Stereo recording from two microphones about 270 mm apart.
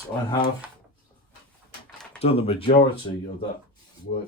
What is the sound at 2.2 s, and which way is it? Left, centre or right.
Speech, left.